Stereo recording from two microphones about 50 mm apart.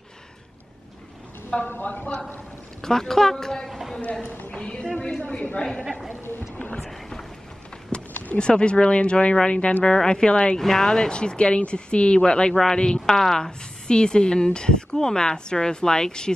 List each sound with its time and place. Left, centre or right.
1.7 s speech: left
2.0 s speech: left
2.8 s speech: centre
4.1 s a woman's voice: left
6.9 s a sound: centre
8.1 s a sound: left
8.4 s speech: centre